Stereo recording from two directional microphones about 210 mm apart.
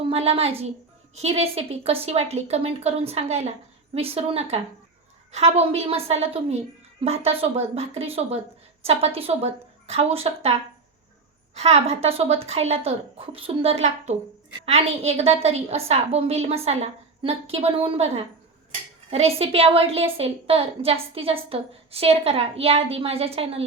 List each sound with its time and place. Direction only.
0.1 s a woman's voice: 30° right (ahead or behind)
11.5 s a woman's voice: 30° right (ahead or behind)